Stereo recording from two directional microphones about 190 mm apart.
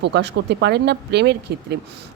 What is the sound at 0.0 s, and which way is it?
A woman's voice, 65° right (ahead or behind).